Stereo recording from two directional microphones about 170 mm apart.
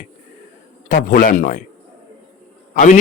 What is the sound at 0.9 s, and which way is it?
Speech, 50° left (ahead or behind).